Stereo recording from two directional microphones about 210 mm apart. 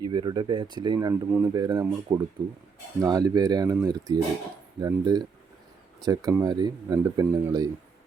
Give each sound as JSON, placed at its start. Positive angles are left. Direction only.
{"t": 0.0, "sound": "speech", "side_deg": -20}